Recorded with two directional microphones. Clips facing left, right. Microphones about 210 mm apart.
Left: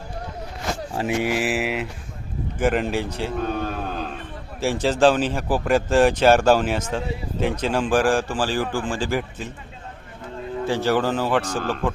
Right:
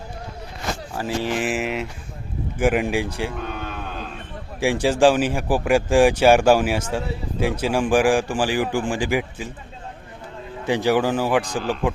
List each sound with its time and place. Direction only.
0.9 s speech: 20° left (ahead or behind)
1.3 s speech: 5° left (ahead or behind)
2.6 s speech: 10° right (ahead or behind)
3.3 s a sound: 35° left (ahead or behind)
4.6 s speech: 10° right (ahead or behind)
10.7 s speech: 15° right (ahead or behind)